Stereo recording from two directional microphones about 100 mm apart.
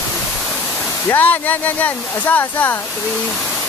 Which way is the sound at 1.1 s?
15° left (ahead or behind).